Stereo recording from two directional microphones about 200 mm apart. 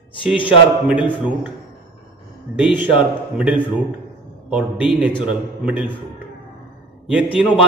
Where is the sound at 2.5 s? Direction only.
5° right (ahead or behind).